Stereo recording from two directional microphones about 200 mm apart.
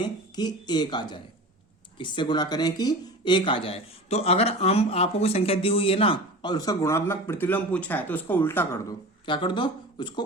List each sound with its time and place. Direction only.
0.0 s speech: 20° left (ahead or behind)
9.2 s speech: 25° left (ahead or behind)